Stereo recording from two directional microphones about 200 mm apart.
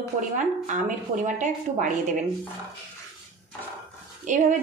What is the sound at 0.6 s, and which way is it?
A woman's voice, 40° right (ahead or behind).